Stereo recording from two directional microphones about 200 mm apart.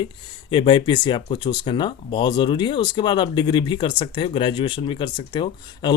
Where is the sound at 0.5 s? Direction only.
25° left (ahead or behind).